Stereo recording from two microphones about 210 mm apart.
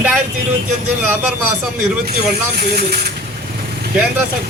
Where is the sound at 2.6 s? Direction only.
45° right (ahead or behind).